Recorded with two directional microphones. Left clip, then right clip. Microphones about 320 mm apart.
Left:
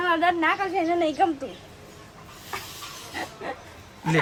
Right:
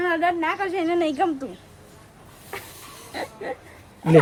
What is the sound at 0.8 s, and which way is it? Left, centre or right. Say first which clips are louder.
Speech: right 1 dB; right.